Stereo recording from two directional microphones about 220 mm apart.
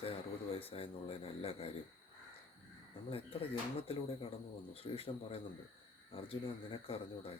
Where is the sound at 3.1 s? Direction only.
25° left (ahead or behind).